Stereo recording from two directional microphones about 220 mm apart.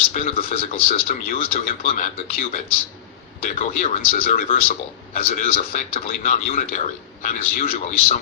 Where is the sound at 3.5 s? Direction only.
35° left (ahead or behind).